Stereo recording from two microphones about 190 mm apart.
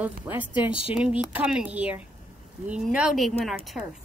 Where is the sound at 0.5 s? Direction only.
30° left (ahead or behind).